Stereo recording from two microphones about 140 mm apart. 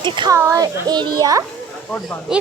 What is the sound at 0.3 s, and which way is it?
A child's voice, 20° right (ahead or behind).